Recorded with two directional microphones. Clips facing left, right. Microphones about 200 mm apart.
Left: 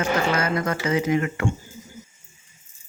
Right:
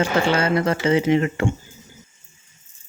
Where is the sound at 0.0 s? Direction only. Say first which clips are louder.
Right 3 dB; 30° right (ahead or behind).